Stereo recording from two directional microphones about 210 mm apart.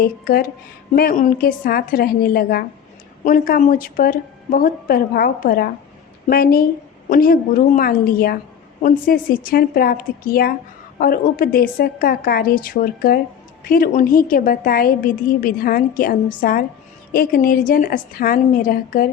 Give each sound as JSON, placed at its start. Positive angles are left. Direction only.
{"t": 0.0, "sound": "a woman's voice", "side_deg": 45}